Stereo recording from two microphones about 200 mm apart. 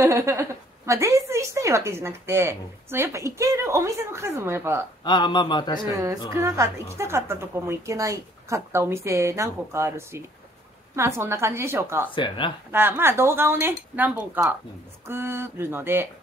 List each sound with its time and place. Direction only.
0.0 s a woman's voice: 15° right (ahead or behind)
5.0 s a man's voice: 20° left (ahead or behind)
6.3 s a woman's voice: 15° right (ahead or behind)
12.2 s a man's voice: 25° left (ahead or behind)
12.7 s a woman's voice: 10° right (ahead or behind)